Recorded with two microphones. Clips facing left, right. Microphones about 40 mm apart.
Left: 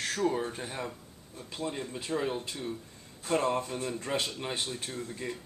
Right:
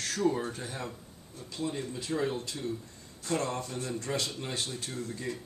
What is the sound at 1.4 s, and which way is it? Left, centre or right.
Speech, left.